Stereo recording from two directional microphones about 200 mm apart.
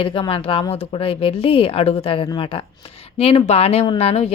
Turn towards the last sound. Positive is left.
turn(degrees=30)  # may be behind; listen again after turning